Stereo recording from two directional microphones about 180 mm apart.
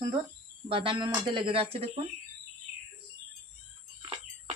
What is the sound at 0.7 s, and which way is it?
Speech, 30° right (ahead or behind).